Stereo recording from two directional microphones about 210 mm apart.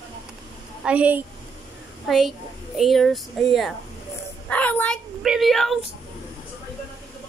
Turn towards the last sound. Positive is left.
turn(degrees=0)  # may be behind; listen again after turning